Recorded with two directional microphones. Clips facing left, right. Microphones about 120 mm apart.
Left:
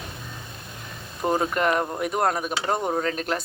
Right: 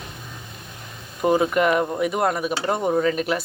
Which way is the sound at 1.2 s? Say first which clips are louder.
Right 4 dB; 10° right (ahead or behind).